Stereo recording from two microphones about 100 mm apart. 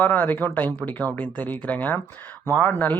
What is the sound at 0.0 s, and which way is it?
Speech, 15° left (ahead or behind).